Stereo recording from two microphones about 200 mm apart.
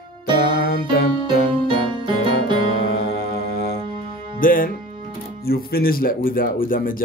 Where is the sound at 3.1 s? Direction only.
55° left (ahead or behind).